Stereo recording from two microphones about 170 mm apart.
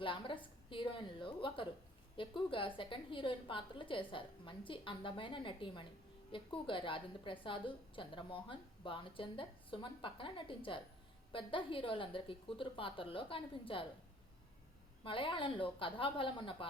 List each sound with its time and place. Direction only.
0.0 s a woman's voice: 30° left (ahead or behind)
15.0 s a woman's voice: 30° left (ahead or behind)